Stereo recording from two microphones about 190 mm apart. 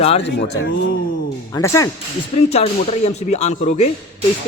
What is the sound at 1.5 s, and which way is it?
Speech, 15° left (ahead or behind).